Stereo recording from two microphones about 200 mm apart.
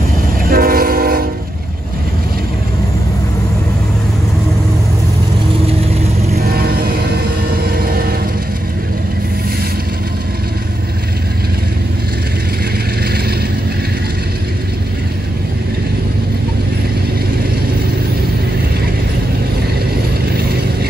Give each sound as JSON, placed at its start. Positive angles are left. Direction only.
{"t": 0.5, "sound": "train", "side_deg": -45}
{"t": 6.3, "sound": "train", "side_deg": -50}
{"t": 7.5, "sound": "vehicle", "side_deg": -50}